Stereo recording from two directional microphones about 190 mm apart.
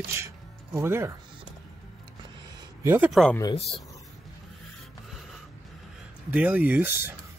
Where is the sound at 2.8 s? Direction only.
15° right (ahead or behind).